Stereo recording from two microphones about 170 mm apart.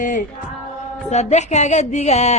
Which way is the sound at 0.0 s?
50° left (ahead or behind).